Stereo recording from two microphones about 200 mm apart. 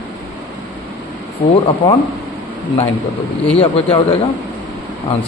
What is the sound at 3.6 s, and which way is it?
Speech, 30° left (ahead or behind).